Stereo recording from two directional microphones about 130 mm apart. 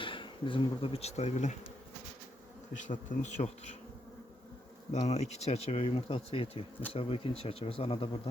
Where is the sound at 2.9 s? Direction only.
70° left (ahead or behind).